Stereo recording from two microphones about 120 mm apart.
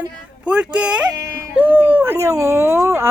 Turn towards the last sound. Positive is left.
turn(degrees=-20)  # may be behind; listen again after turning